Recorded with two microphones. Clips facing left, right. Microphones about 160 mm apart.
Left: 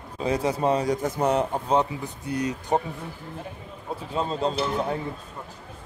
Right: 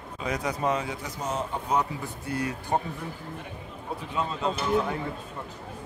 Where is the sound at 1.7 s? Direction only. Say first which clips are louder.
Left 4 dB; 25° left (ahead or behind).